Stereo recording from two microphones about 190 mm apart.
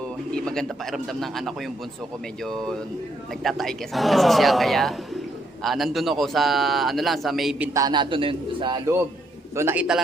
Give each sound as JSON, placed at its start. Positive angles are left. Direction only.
{"t": 0.3, "sound": "a man's voice", "side_deg": 5}
{"t": 7.7, "sound": "a man's voice", "side_deg": -20}
{"t": 9.6, "sound": "a man's voice", "side_deg": -10}